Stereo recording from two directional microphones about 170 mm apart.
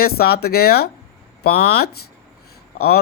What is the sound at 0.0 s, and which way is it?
Speech, 65° left (ahead or behind).